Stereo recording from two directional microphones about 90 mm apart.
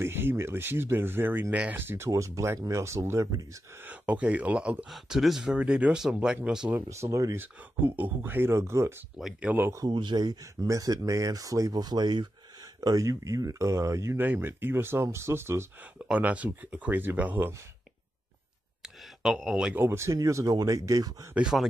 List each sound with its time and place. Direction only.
0.0 s speech: 25° right (ahead or behind)
2.0 s speech: 35° right (ahead or behind)
3.8 s speech: 15° right (ahead or behind)
6.9 s speech: 35° right (ahead or behind)
7.3 s speech: 20° right (ahead or behind)
9.2 s speech: 15° right (ahead or behind)
9.8 s speech: 60° right (ahead or behind)
12.8 s speech: 40° right (ahead or behind)
14.2 s speech: 20° right (ahead or behind)
16.1 s speech: 15° right (ahead or behind)
18.8 s a sound: centre (ahead or behind)
19.7 s speech: 25° right (ahead or behind)
21.4 s speech: 5° right (ahead or behind)